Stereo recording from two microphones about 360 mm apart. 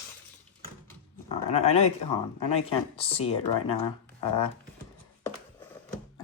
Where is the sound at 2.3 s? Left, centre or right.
Centre.